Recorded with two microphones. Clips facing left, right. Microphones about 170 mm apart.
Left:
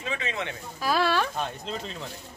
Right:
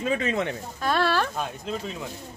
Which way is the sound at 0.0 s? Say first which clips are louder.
Right 7 dB; 45° right (ahead or behind).